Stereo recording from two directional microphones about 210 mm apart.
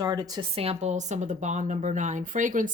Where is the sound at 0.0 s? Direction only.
20° right (ahead or behind).